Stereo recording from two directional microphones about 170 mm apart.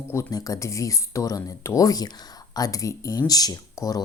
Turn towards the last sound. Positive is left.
turn(degrees=20)  # may be behind; listen again after turning